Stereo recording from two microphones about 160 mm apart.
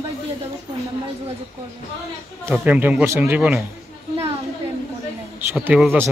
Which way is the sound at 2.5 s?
10° right (ahead or behind).